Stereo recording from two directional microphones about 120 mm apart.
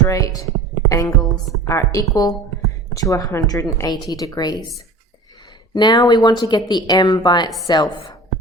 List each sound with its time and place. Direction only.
0.1 s a woman's voice: 30° left (ahead or behind)
5.7 s a woman's voice: 35° left (ahead or behind)